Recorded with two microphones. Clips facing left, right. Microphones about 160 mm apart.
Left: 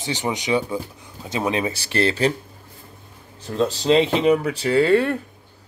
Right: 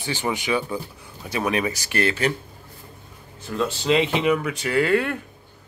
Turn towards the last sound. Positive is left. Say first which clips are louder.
# left 4 dB
turn(degrees=30)  # may be behind; listen again after turning